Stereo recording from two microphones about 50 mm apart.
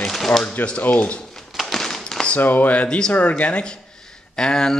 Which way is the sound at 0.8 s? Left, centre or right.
Left.